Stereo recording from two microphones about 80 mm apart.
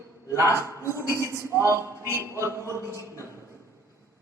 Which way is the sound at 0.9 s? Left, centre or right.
Right.